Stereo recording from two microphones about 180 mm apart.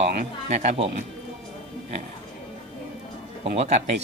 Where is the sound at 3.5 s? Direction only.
35° right (ahead or behind).